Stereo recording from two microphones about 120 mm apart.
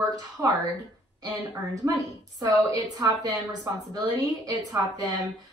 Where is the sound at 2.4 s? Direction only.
30° right (ahead or behind).